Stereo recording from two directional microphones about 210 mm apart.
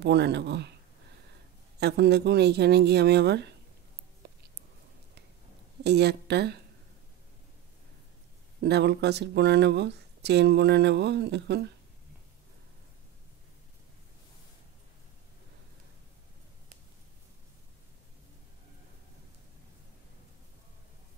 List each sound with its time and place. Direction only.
0.0 s speech: 55° right (ahead or behind)
1.8 s speech: 50° right (ahead or behind)
4.2 s a sound: 50° right (ahead or behind)
5.9 s speech: 50° right (ahead or behind)
8.5 s speech: 50° right (ahead or behind)